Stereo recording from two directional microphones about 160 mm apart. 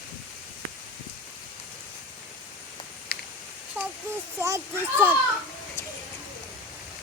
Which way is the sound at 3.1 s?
65° left (ahead or behind).